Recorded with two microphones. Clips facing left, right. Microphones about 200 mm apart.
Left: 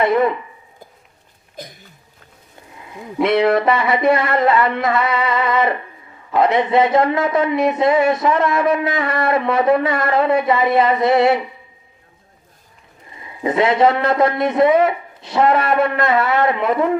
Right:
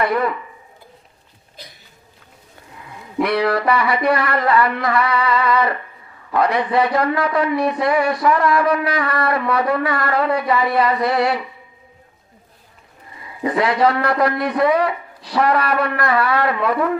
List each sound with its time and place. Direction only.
0.0 s a man's voice: 25° left (ahead or behind)
1.6 s a sound: 45° left (ahead or behind)
2.8 s a man's voice: 25° left (ahead or behind)
13.1 s a man's voice: 25° left (ahead or behind)